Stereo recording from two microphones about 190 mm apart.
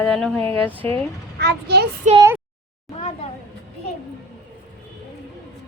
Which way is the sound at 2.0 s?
40° right (ahead or behind).